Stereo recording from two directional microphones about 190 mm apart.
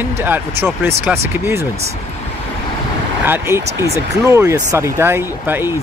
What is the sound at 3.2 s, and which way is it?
A man's voice, 10° right (ahead or behind).